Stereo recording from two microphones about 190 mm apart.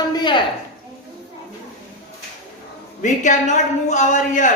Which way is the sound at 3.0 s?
40° left (ahead or behind).